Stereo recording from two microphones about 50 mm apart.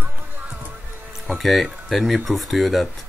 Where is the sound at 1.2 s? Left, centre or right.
Centre.